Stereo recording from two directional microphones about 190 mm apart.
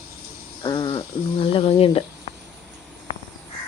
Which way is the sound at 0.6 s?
25° left (ahead or behind).